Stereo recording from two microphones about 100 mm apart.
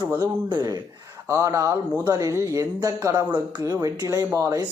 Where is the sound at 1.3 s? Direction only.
30° right (ahead or behind).